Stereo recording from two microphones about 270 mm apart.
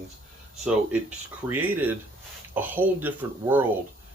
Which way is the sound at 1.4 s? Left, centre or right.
Centre.